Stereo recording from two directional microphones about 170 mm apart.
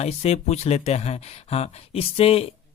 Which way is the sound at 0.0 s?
40° left (ahead or behind).